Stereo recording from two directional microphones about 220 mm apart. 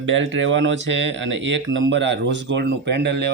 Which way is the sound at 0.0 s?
60° right (ahead or behind).